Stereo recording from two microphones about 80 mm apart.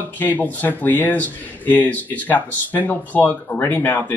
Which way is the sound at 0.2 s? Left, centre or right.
Left.